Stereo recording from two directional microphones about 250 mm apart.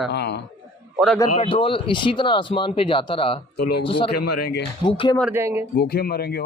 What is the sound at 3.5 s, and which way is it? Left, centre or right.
Speech, left.